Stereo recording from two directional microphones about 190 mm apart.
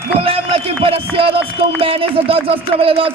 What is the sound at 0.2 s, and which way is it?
Speech, 30° right (ahead or behind).